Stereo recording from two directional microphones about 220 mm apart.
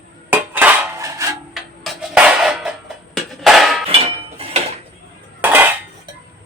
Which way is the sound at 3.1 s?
Centre (ahead or behind).